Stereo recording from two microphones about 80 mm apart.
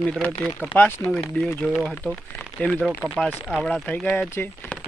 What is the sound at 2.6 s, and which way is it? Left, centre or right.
Speech, centre.